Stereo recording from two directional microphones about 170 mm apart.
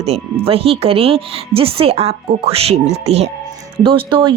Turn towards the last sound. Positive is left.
turn(degrees=-30)  # may be behind; listen again after turning